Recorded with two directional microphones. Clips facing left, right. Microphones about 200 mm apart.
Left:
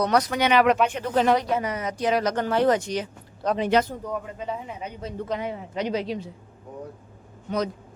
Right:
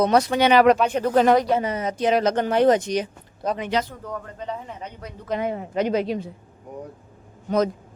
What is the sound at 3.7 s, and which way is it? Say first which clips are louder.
Speech: left 4 dB; 55° left (ahead or behind).